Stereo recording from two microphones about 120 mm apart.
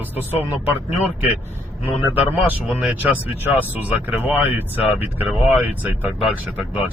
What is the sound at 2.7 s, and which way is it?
Speech, 10° right (ahead or behind).